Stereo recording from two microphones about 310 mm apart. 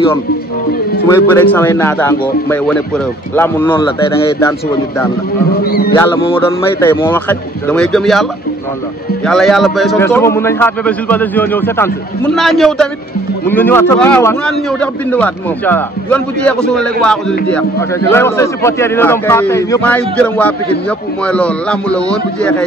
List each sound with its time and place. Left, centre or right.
1.0 s a man's voice: centre
5.6 s speech: left
5.9 s a man's voice: centre